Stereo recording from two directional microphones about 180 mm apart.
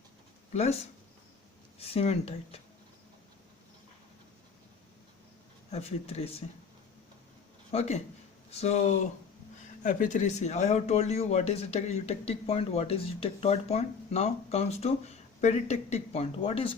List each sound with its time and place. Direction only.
0.5 s speech: 35° left (ahead or behind)
5.7 s speech: 35° left (ahead or behind)
7.7 s speech: 35° left (ahead or behind)